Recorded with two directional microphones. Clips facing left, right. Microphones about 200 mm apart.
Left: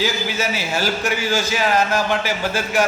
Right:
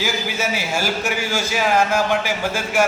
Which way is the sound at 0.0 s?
10° right (ahead or behind).